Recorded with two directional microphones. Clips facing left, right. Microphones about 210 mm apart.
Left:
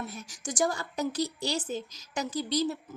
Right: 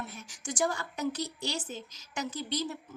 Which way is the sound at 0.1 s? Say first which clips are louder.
Left 2 dB; 40° left (ahead or behind).